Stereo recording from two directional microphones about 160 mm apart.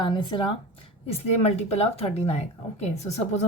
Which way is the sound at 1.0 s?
40° left (ahead or behind).